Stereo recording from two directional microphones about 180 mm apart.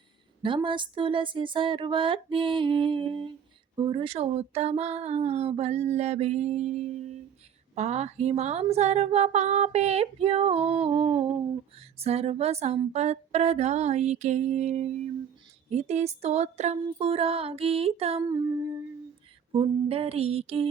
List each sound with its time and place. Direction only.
0.4 s speech: 25° right (ahead or behind)
19.5 s speech: 30° right (ahead or behind)